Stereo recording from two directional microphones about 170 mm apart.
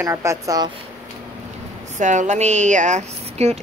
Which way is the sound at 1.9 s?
45° right (ahead or behind).